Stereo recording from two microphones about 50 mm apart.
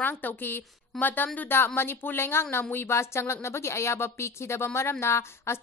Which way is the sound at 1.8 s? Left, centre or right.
Left.